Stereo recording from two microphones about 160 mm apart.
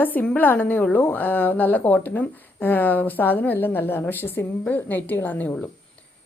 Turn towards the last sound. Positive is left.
turn(degrees=10)  # may be behind; listen again after turning